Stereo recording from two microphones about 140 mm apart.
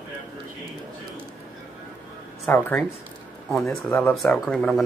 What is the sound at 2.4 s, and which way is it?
Speech, 15° left (ahead or behind).